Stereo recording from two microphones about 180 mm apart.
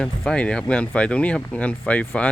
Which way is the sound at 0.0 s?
5° left (ahead or behind).